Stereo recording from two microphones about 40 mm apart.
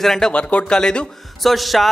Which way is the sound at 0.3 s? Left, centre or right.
Left.